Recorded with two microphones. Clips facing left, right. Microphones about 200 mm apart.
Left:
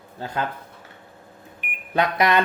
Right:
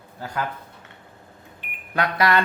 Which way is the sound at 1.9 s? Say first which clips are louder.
Left 1 dB; 20° left (ahead or behind).